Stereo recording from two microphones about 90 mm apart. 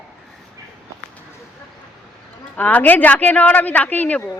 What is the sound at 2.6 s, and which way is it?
A woman's voice, 20° left (ahead or behind).